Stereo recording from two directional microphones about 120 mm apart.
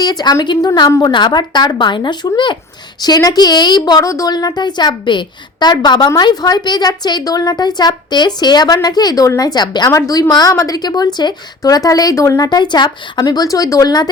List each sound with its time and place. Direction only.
0.0 s a woman's voice: 35° left (ahead or behind)